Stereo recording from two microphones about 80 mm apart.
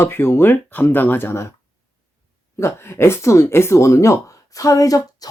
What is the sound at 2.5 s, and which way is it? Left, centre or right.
Speech, left.